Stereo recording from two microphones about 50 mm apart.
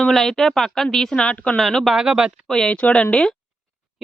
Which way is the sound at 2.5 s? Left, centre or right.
Centre.